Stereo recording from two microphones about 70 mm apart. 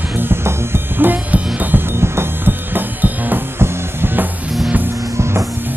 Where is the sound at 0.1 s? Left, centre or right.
Right.